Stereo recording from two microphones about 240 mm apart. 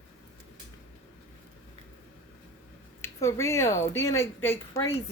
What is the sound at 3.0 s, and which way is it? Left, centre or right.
Speech, centre.